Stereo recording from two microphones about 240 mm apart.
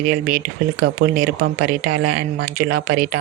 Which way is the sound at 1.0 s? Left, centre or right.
Right.